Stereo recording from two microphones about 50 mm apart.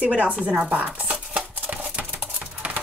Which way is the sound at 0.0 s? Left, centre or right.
Right.